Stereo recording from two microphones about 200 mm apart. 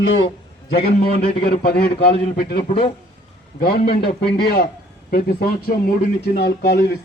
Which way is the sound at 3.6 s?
50° left (ahead or behind).